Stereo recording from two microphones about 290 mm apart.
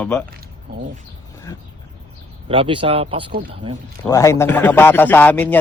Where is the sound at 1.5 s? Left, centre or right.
Centre.